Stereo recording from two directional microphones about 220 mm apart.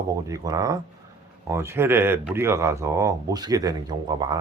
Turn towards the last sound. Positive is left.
turn(degrees=-15)  # may be behind; listen again after turning